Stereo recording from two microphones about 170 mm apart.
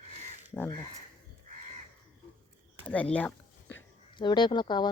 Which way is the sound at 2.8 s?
10° left (ahead or behind).